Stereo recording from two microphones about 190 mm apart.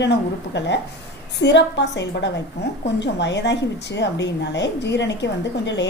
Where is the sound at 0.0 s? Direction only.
65° left (ahead or behind).